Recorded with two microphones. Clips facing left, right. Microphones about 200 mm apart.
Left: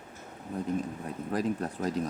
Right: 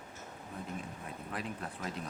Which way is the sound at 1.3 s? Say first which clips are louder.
Left 11 dB; 40° left (ahead or behind).